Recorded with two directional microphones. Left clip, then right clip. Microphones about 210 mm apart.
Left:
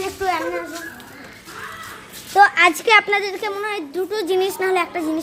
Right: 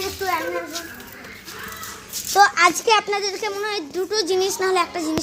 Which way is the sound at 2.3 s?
5° left (ahead or behind).